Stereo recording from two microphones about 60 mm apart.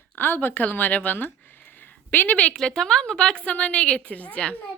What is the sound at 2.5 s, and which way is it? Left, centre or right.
A woman's voice, centre.